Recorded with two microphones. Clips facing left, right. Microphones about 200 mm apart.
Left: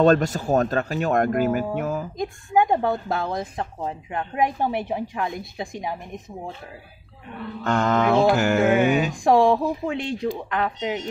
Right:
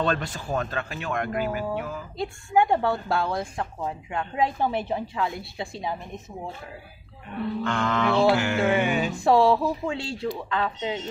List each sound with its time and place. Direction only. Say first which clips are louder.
0.0 s speech: left 9 dB; 40° left (ahead or behind)
2.1 s a woman's voice: even; 15° left (ahead or behind)
7.6 s music: left 6 dB; 40° left (ahead or behind)
9.1 s speech: right 2 dB; 15° left (ahead or behind)